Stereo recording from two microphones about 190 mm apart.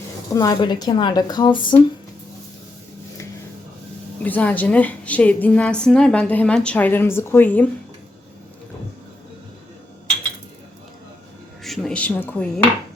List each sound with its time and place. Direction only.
0.3 s a woman's voice: 20° left (ahead or behind)
4.2 s a woman's voice: 10° left (ahead or behind)
11.6 s speech: centre (ahead or behind)